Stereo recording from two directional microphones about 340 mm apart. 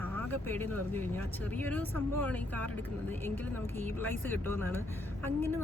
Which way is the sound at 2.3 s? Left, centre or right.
Centre.